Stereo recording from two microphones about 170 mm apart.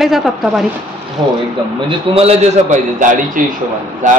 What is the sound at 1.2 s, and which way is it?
A man's voice, 25° right (ahead or behind).